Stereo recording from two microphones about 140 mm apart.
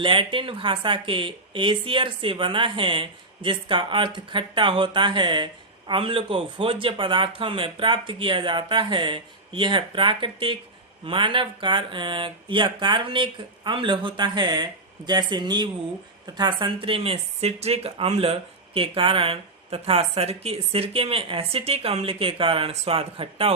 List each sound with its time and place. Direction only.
0.0 s speech: 35° right (ahead or behind)